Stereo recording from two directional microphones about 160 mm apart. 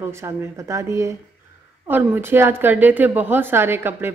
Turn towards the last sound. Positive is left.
turn(degrees=-15)  # may be behind; listen again after turning